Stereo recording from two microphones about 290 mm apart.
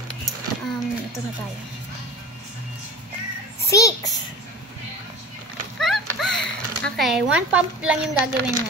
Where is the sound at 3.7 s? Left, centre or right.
Centre.